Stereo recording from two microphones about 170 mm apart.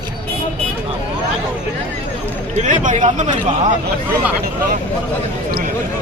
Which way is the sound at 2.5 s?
45° right (ahead or behind).